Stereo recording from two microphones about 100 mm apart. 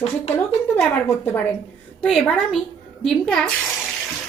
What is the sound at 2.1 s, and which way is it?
A woman's voice, centre (ahead or behind).